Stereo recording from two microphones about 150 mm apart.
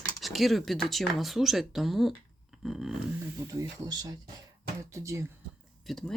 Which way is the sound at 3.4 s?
25° right (ahead or behind).